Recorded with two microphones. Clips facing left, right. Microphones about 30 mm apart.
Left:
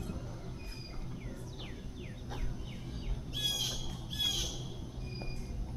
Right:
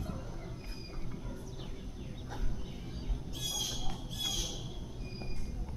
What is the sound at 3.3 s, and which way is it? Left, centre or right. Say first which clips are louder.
Squawk: left 3 dB; centre.